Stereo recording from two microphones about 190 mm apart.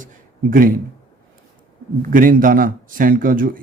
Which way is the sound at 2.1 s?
45° right (ahead or behind).